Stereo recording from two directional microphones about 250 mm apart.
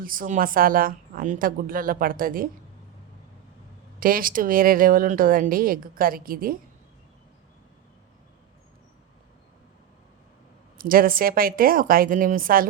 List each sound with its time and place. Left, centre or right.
0.0 s speech: right
4.0 s speech: right
10.8 s speech: right